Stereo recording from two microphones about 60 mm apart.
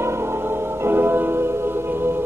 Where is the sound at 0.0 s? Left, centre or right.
Right.